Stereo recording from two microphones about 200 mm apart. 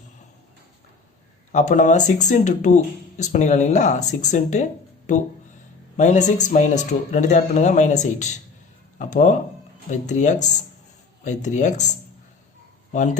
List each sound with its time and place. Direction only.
1.5 s speech: 35° left (ahead or behind)